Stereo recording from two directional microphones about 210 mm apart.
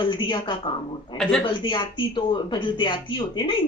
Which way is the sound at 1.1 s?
5° left (ahead or behind).